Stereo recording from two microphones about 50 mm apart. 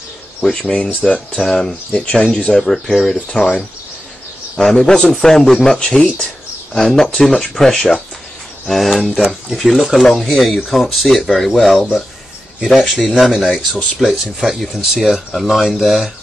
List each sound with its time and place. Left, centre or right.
0.4 s speech: centre
1.3 s speech: centre
1.9 s speech: left
2.3 s speech: centre
3.3 s speech: centre